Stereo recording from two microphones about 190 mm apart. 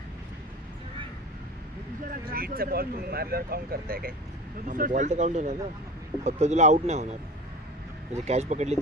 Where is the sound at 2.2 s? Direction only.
50° right (ahead or behind).